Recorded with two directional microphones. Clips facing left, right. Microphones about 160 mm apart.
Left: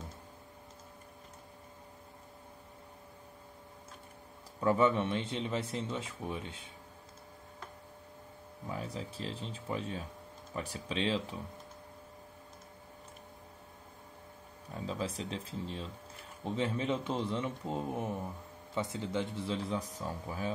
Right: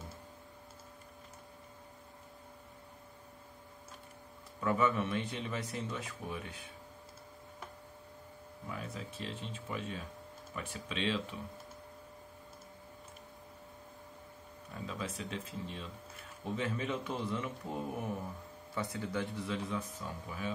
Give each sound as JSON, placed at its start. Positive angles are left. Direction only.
{"t": 4.6, "sound": "a man's voice", "side_deg": 30}
{"t": 8.6, "sound": "speech", "side_deg": 30}
{"t": 14.9, "sound": "a man's voice", "side_deg": 30}